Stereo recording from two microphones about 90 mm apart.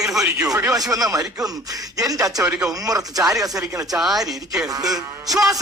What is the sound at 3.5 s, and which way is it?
Speech, 10° right (ahead or behind).